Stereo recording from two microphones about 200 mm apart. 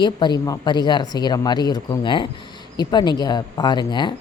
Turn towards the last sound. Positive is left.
turn(degrees=20)  # may be behind; listen again after turning